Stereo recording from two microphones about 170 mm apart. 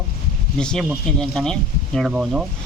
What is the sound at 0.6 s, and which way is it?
Speech, 5° left (ahead or behind).